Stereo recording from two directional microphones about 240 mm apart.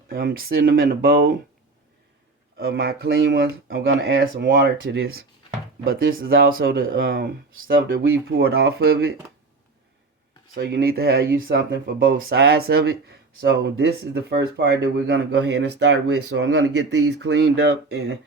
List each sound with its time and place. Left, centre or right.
0.1 s speech: right
2.6 s speech: right
10.5 s speech: right